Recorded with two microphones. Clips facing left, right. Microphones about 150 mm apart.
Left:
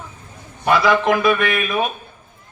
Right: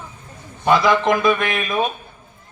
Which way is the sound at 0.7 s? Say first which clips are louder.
Even; 20° right (ahead or behind).